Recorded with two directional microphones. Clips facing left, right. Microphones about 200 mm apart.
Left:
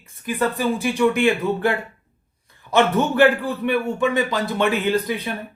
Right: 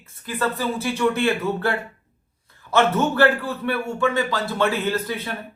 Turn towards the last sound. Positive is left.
turn(degrees=15)  # may be behind; listen again after turning